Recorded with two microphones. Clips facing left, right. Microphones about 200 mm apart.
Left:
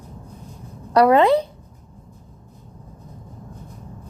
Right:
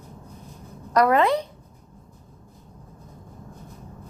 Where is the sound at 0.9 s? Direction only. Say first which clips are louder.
Left 5 dB; 30° left (ahead or behind).